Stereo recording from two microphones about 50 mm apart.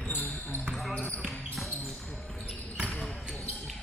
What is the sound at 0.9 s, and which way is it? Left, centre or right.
Basketball bounce, left.